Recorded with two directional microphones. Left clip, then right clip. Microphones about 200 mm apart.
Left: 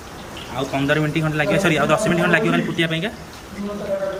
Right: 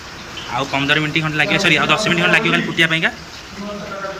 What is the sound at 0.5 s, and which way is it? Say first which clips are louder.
A man's voice: right 3 dB; 15° left (ahead or behind).